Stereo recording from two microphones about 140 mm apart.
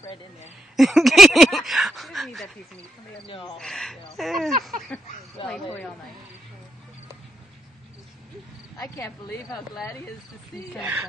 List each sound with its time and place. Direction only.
0.7 s speech: centre (ahead or behind)
3.5 s speech: centre (ahead or behind)
5.5 s speech: 10° left (ahead or behind)
8.7 s speech: 20° left (ahead or behind)
10.8 s speech: 10° right (ahead or behind)